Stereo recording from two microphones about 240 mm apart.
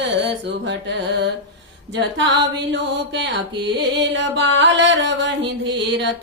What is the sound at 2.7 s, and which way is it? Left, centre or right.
Music, right.